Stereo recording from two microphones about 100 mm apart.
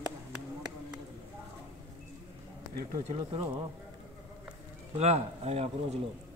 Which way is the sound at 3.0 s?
65° right (ahead or behind).